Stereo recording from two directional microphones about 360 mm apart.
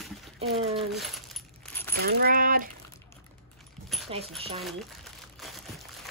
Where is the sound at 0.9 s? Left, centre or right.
Centre.